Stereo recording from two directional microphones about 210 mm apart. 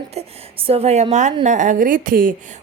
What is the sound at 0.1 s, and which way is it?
A woman's voice, 30° right (ahead or behind).